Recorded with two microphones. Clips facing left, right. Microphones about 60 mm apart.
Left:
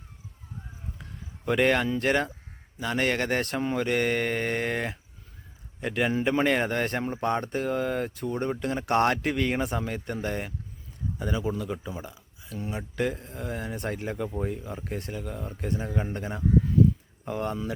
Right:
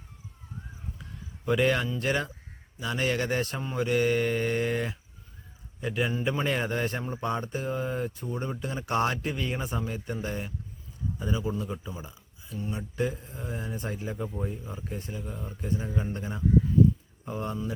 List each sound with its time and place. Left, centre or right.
1.5 s speech: left